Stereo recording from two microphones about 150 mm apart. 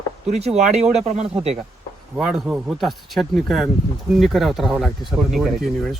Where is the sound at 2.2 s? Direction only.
5° right (ahead or behind).